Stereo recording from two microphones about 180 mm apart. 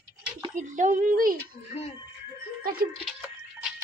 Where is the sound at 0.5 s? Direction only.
45° right (ahead or behind).